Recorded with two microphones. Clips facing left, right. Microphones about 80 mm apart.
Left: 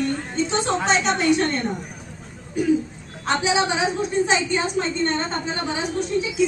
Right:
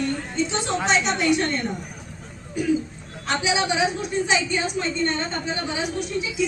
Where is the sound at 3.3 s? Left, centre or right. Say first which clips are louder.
Left 2 dB; left.